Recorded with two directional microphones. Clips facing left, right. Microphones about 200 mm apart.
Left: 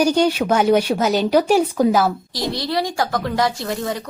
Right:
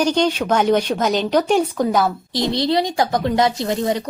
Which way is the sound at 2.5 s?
20° right (ahead or behind).